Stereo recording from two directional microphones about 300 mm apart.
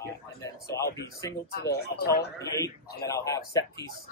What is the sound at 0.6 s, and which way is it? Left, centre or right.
Speech, centre.